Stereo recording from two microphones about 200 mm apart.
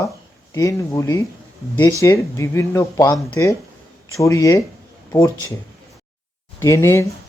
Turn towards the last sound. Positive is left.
turn(degrees=15)  # may be behind; listen again after turning